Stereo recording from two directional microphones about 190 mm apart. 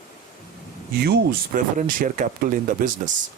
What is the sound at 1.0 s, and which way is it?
Speech, 50° right (ahead or behind).